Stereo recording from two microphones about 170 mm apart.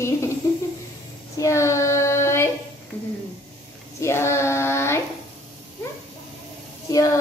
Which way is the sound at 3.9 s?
15° left (ahead or behind).